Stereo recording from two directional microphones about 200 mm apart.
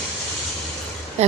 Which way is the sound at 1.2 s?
35° right (ahead or behind).